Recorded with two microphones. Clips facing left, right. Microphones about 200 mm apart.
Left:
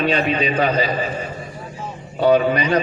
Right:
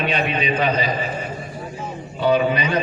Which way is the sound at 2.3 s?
45° left (ahead or behind).